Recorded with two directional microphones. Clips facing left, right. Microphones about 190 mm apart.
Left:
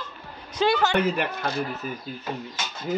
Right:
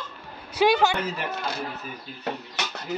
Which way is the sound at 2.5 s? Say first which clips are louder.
Left 2 dB; 70° right (ahead or behind).